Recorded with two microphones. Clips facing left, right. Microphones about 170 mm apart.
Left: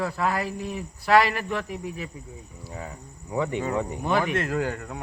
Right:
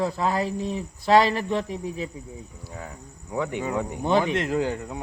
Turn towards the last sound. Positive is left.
turn(degrees=-20)  # may be behind; listen again after turning